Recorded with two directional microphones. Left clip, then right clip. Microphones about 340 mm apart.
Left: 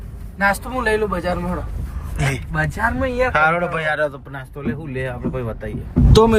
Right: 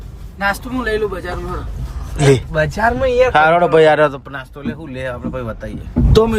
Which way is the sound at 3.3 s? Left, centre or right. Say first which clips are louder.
Right 7 dB; centre.